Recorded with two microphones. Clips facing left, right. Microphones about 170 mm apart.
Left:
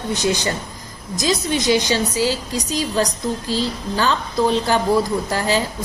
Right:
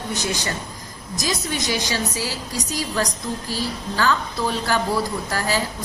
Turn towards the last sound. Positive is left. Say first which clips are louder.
# left 4 dB
turn(degrees=20)  # may be behind; listen again after turning